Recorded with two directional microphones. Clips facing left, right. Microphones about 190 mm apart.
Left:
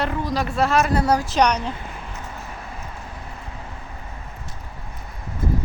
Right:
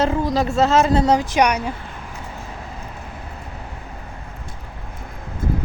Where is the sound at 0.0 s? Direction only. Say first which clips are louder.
Right 5 dB; 25° right (ahead or behind); by 1.7 s 10° right (ahead or behind).